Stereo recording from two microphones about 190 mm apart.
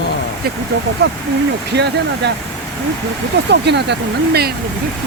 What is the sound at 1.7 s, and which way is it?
Speech, 65° right (ahead or behind).